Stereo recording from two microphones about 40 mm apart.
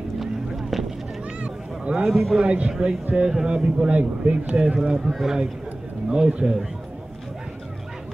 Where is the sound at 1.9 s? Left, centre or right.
Right.